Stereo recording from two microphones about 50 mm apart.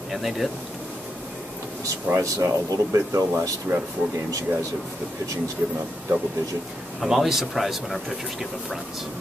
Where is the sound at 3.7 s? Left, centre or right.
Right.